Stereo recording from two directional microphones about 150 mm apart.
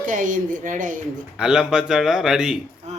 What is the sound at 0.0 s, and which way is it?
A woman's voice, 60° right (ahead or behind).